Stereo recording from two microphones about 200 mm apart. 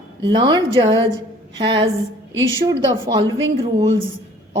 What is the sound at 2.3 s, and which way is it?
Speech, 75° right (ahead or behind).